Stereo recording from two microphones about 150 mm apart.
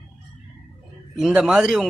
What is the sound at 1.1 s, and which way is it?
Speech, centre (ahead or behind).